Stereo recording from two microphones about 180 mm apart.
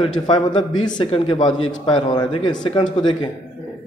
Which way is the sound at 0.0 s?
25° left (ahead or behind).